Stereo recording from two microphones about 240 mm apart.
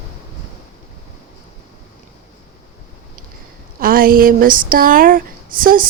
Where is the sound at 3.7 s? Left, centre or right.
Right.